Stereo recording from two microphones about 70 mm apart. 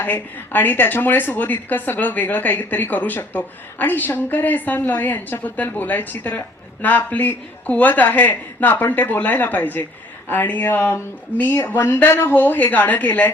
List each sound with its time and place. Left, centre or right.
0.0 s a woman's voice: left
12.3 s a woman's voice: left